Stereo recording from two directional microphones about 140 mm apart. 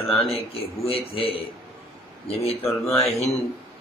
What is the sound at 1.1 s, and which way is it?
Speech, 40° left (ahead or behind).